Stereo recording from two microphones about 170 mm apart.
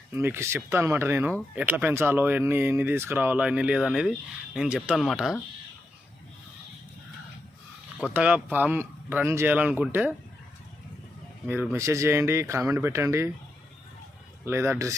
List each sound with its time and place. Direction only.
0.1 s speech: 15° right (ahead or behind)
7.9 s speech: 5° right (ahead or behind)
11.4 s speech: 10° right (ahead or behind)
14.4 s speech: 15° right (ahead or behind)